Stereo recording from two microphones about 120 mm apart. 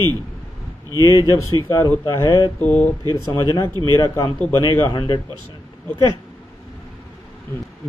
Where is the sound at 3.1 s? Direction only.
25° left (ahead or behind).